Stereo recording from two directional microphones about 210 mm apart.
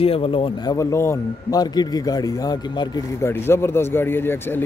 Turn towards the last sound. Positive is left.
turn(degrees=10)  # may be behind; listen again after turning